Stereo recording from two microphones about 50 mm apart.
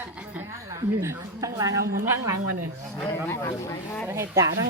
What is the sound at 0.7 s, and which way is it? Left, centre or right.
A woman's voice, right.